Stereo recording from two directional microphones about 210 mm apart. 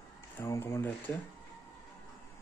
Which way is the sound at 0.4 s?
10° left (ahead or behind).